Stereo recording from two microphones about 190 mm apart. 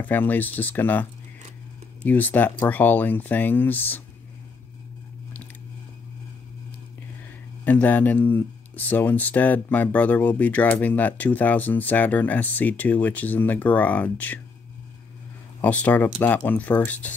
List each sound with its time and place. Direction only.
0.0 s speech: 10° left (ahead or behind)
2.0 s speech: 10° left (ahead or behind)
7.6 s speech: 10° left (ahead or behind)
15.6 s speech: 10° left (ahead or behind)